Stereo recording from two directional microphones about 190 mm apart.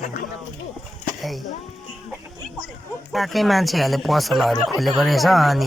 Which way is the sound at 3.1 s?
Centre (ahead or behind).